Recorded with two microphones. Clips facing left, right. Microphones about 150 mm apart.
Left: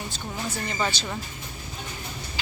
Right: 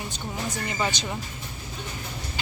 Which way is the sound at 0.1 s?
10° right (ahead or behind).